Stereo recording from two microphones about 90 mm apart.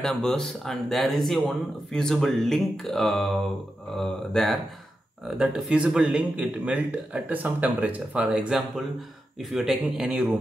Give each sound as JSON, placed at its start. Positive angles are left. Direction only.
{"t": 0.0, "sound": "speech", "side_deg": 5}
{"t": 5.4, "sound": "speech", "side_deg": -10}